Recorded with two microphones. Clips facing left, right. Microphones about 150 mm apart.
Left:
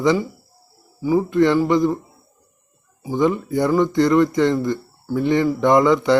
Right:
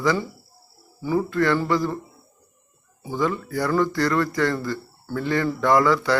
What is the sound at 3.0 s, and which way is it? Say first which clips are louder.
Speech: left 6 dB; 20° left (ahead or behind).